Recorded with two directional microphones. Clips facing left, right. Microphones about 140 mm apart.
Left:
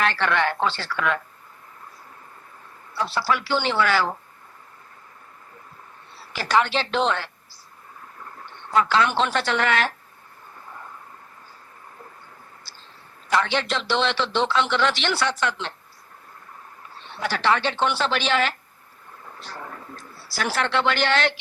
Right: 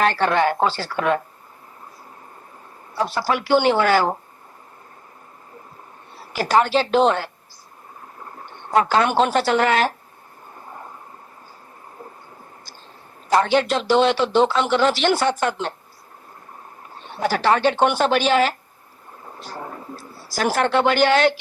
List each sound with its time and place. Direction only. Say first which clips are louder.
0.0 s speech: right 4 dB; 40° right (ahead or behind)
2.9 s speech: right 2 dB; 40° right (ahead or behind)
6.1 s a woman's voice: right 4 dB; 45° right (ahead or behind)
8.4 s speech: right 3 dB; 45° right (ahead or behind)
10.7 s a sound: right 3 dB; 35° right (ahead or behind)
13.3 s speech: right 6 dB; 40° right (ahead or behind)
16.9 s speech: right 6 dB; 45° right (ahead or behind)
19.6 s a sound: right 4 dB; 25° right (ahead or behind)
20.1 s speech: right 5 dB; 40° right (ahead or behind)